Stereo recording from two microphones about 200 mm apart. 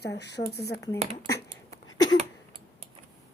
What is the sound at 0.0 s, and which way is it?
Speech, 60° left (ahead or behind).